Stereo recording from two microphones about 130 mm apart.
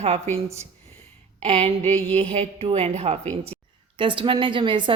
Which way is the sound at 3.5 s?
45° right (ahead or behind).